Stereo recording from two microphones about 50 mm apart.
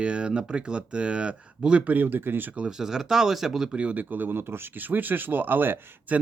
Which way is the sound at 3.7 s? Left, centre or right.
Right.